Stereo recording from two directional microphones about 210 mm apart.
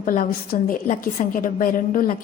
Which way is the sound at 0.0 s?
40° left (ahead or behind).